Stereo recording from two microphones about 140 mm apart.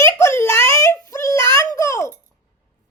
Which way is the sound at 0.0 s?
20° left (ahead or behind).